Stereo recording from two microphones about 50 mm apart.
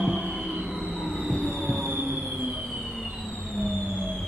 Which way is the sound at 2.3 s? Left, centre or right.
Centre.